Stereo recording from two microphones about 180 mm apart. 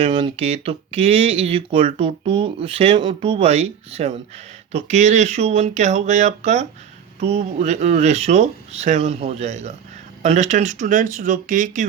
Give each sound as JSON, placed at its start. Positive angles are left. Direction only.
{"t": 0.0, "sound": "speech", "side_deg": -25}